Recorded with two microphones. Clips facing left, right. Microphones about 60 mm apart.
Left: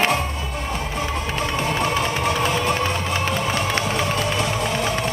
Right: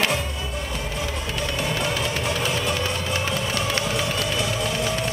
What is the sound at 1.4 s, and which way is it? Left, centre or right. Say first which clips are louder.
Music: left 3 dB; left.